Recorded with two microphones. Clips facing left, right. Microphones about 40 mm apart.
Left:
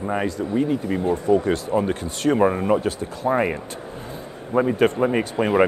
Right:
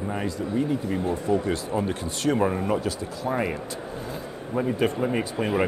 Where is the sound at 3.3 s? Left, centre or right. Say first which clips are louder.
Left 6 dB; left.